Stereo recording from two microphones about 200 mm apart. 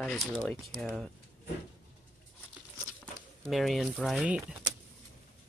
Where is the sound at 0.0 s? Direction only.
5° left (ahead or behind).